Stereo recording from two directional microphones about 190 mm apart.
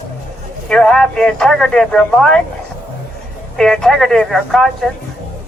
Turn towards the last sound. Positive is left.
turn(degrees=0)  # may be behind; listen again after turning